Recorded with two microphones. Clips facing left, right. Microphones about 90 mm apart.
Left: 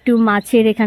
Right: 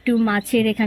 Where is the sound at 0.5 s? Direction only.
45° left (ahead or behind).